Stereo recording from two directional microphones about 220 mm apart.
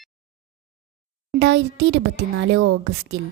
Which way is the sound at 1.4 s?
50° right (ahead or behind).